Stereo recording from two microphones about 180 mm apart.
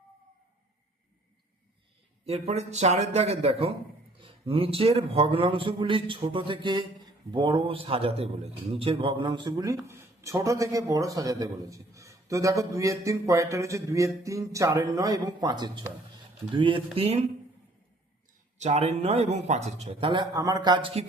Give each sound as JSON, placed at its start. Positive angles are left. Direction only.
{"t": 2.2, "sound": "a man's voice", "side_deg": -35}
{"t": 18.6, "sound": "speech", "side_deg": -35}